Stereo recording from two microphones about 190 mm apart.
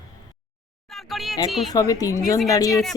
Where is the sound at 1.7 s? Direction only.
20° left (ahead or behind).